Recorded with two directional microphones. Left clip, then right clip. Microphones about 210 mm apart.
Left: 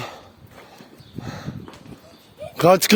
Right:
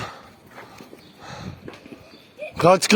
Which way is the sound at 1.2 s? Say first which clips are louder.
Left 1 dB; 60° left (ahead or behind).